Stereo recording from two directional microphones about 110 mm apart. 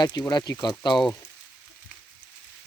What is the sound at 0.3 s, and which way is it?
Speech, 40° left (ahead or behind).